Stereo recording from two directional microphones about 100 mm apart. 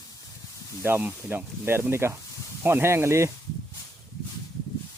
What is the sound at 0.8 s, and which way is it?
Speech, 20° right (ahead or behind).